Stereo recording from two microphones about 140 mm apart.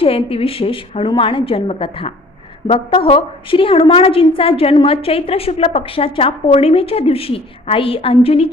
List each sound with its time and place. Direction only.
0.0 s a woman's voice: 40° left (ahead or behind)